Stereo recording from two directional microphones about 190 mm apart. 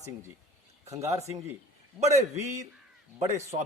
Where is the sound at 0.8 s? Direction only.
35° right (ahead or behind).